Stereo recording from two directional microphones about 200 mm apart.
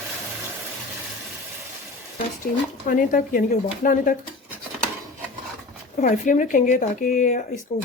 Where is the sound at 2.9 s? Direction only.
45° left (ahead or behind).